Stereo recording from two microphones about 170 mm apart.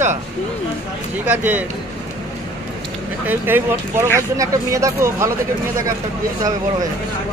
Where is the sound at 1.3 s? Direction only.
10° right (ahead or behind).